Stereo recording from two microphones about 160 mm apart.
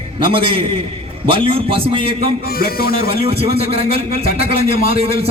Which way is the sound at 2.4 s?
70° left (ahead or behind).